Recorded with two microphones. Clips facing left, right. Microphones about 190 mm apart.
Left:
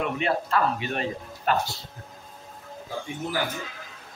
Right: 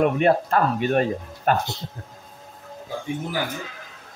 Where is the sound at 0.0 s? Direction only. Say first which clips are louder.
Right 8 dB; 50° right (ahead or behind).